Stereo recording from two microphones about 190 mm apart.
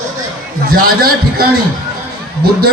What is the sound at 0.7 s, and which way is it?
Speech, 50° right (ahead or behind).